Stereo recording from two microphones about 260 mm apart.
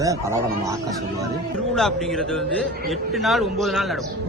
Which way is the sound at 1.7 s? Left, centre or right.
Centre.